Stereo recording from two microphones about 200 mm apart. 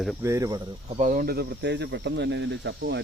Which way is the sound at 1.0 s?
40° right (ahead or behind).